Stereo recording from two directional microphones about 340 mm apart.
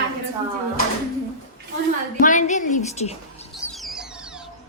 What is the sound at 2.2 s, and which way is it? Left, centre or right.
Speech, left.